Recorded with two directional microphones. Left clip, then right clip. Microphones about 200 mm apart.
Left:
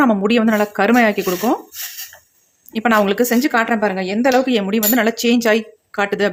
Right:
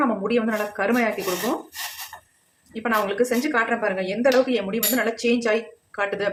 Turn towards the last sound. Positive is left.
turn(degrees=50)  # may be behind; listen again after turning